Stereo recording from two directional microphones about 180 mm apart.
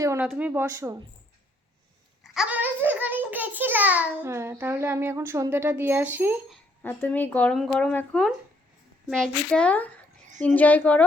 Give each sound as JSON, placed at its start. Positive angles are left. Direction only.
{"t": 0.0, "sound": "a sound", "side_deg": -15}
{"t": 0.3, "sound": "a child's voice", "side_deg": -10}
{"t": 2.3, "sound": "a child's voice", "side_deg": -5}
{"t": 6.5, "sound": "speech", "side_deg": 10}